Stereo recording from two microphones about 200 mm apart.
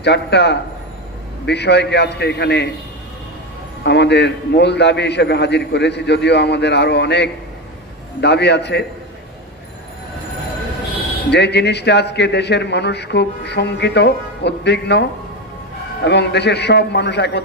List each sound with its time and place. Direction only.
0.0 s a man's voice: 55° left (ahead or behind)
3.8 s a man's voice: 55° left (ahead or behind)
11.2 s a man's voice: 60° left (ahead or behind)